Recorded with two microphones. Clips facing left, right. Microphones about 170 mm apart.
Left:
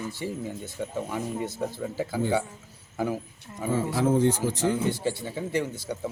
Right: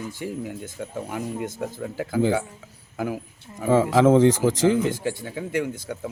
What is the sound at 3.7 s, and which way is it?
Speech, 90° right.